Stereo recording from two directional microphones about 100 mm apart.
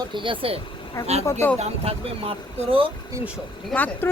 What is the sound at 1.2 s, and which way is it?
Speech, 30° left (ahead or behind).